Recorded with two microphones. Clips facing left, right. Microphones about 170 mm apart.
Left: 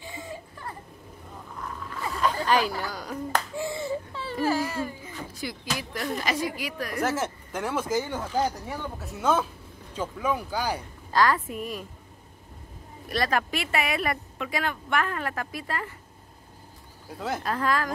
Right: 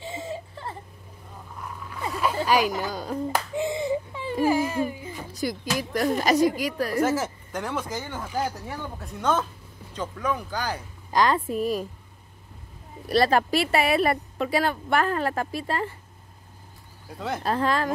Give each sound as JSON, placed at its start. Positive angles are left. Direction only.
{"t": 0.0, "sound": "baby cry", "side_deg": -25}
{"t": 1.6, "sound": "a sound", "side_deg": -10}
{"t": 2.4, "sound": "speech", "side_deg": -10}
{"t": 3.3, "sound": "baby cry", "side_deg": -15}
{"t": 5.3, "sound": "speech", "side_deg": -40}
{"t": 7.0, "sound": "speech", "side_deg": 0}
{"t": 11.1, "sound": "speech", "side_deg": -20}
{"t": 13.1, "sound": "speech", "side_deg": -30}
{"t": 17.4, "sound": "speech", "side_deg": -30}